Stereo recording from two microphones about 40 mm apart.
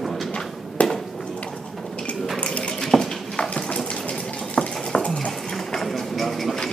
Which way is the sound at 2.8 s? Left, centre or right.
Centre.